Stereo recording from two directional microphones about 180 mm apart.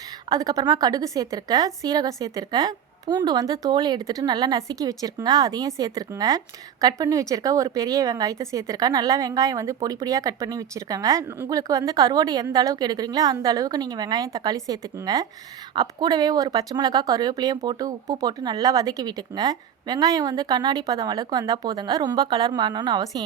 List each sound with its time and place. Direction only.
0.3 s a woman's voice: 20° right (ahead or behind)